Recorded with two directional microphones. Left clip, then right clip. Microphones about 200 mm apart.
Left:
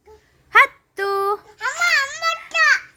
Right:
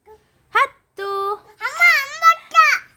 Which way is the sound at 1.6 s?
25° right (ahead or behind).